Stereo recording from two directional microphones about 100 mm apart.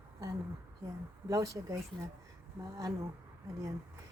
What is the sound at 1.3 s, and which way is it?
A woman's voice, 30° right (ahead or behind).